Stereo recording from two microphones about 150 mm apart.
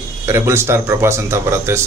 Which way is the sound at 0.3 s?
15° right (ahead or behind).